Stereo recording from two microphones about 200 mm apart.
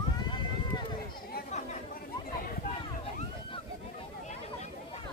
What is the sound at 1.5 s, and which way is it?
Chatter, 35° left (ahead or behind).